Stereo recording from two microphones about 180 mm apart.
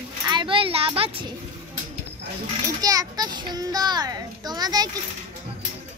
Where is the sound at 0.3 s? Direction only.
25° right (ahead or behind).